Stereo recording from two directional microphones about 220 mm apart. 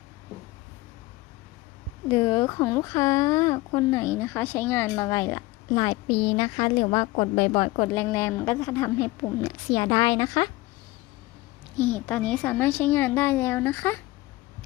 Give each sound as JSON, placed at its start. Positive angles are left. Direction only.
{"t": 2.0, "sound": "speech", "side_deg": 15}
{"t": 11.8, "sound": "speech", "side_deg": 5}